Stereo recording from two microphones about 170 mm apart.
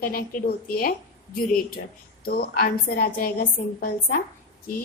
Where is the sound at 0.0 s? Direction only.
55° left (ahead or behind).